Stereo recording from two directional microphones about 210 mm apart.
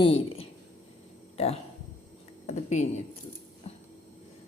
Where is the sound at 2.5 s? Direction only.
35° left (ahead or behind).